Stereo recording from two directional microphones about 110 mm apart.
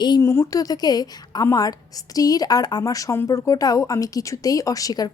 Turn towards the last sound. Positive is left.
turn(degrees=35)  # may be behind; listen again after turning